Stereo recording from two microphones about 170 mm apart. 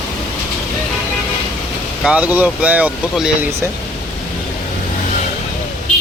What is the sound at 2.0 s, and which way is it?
Speech, 5° right (ahead or behind).